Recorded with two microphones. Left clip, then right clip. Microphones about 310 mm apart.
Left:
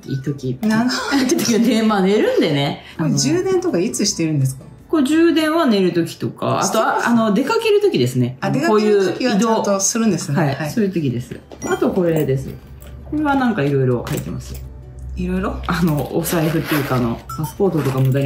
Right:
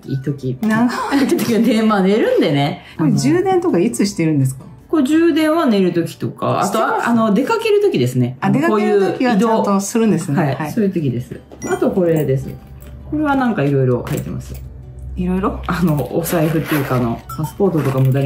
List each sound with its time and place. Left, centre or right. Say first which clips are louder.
0.0 s speech: right 1 dB; centre
0.7 s speech: right 2 dB; right
1.1 s speech: even; centre
3.1 s speech: right 3 dB; right
4.9 s speech: right 1 dB; centre
8.4 s speech: right 4 dB; right
8.7 s speech: left 2 dB; centre
9.6 s speech: right 1 dB; right
10.3 s speech: right 1 dB; centre
15.6 s speech: right 1 dB; centre